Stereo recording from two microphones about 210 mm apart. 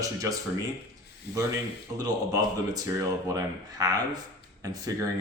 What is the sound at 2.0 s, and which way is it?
A man's voice, 15° right (ahead or behind).